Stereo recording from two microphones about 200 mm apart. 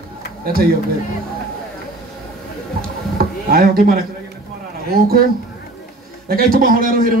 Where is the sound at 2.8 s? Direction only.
50° right (ahead or behind).